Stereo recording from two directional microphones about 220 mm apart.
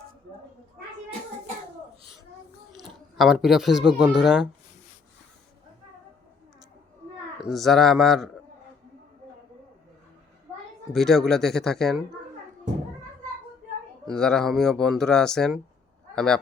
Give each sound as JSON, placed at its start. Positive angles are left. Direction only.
{"t": 2.8, "sound": "speech", "side_deg": 0}
{"t": 7.5, "sound": "speech", "side_deg": 0}
{"t": 10.9, "sound": "speech", "side_deg": 0}
{"t": 14.0, "sound": "speech", "side_deg": 5}